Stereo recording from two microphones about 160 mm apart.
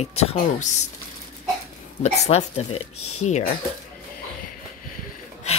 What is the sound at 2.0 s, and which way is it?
Speech, 45° left (ahead or behind).